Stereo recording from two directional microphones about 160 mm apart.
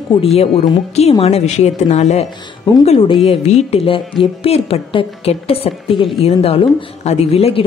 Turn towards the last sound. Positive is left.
turn(degrees=40)  # may be behind; listen again after turning